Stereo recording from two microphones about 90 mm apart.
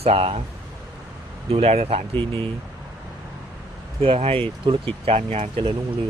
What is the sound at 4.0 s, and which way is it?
Speech, 90° right.